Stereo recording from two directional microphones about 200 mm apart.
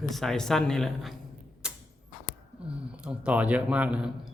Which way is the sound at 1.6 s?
5° right (ahead or behind).